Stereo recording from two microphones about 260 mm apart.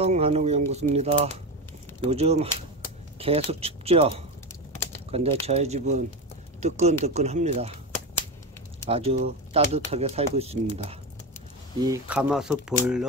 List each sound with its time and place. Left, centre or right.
0.0 s speech: right
8.8 s speech: right
11.8 s speech: centre